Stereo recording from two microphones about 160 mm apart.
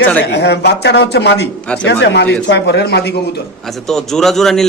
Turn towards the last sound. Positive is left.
turn(degrees=0)  # may be behind; listen again after turning